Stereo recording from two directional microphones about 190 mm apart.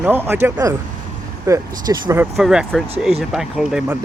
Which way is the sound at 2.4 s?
Centre (ahead or behind).